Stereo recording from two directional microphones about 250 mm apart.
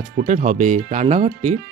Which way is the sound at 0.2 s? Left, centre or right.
Right.